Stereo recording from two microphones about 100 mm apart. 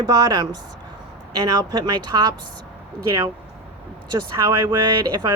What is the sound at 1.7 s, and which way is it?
Speech, 45° right (ahead or behind).